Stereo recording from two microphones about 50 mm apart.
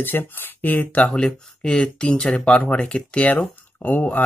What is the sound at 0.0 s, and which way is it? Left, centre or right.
Speech, left.